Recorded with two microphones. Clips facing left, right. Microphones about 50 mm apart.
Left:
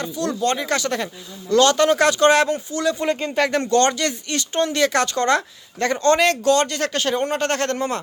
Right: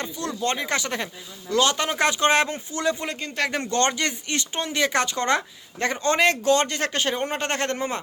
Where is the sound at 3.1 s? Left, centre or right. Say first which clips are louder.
Left 6 dB; centre.